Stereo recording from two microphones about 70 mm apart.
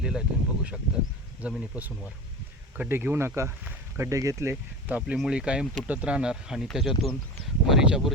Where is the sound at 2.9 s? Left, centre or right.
Right.